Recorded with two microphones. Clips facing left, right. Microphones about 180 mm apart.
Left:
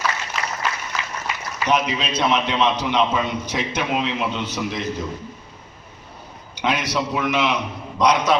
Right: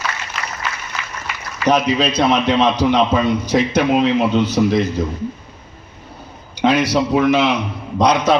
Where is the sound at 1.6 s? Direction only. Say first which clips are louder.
Right 6 dB; 35° right (ahead or behind).